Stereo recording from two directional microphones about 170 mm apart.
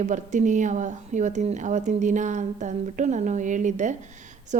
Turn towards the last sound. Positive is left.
turn(degrees=-45)  # may be behind; listen again after turning